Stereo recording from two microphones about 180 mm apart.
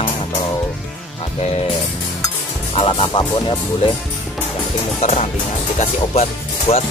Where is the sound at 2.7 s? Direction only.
30° left (ahead or behind).